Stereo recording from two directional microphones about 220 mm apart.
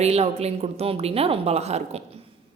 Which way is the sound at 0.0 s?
30° right (ahead or behind).